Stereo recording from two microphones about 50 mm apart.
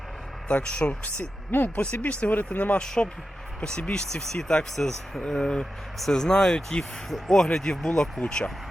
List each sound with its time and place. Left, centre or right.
0.5 s speech: left
1.5 s speech: left
1.7 s speech: left
2.8 s speech: centre